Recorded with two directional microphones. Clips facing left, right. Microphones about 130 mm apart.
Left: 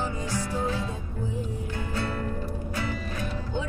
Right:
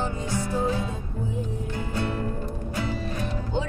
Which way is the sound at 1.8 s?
20° right (ahead or behind).